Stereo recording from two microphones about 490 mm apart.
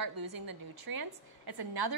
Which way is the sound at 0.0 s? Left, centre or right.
Right.